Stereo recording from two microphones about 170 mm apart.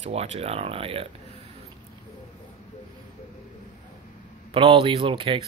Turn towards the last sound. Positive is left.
turn(degrees=-30)  # may be behind; listen again after turning